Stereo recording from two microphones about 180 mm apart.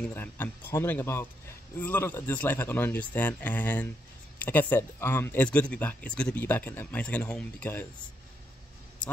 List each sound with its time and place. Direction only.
0.0 s speech: 10° left (ahead or behind)